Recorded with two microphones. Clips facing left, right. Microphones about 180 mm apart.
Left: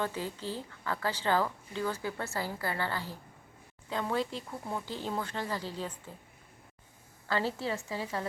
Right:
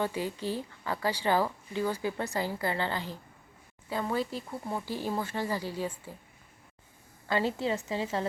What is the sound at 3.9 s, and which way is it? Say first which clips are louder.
A woman's voice: right 1 dB; 5° right (ahead or behind).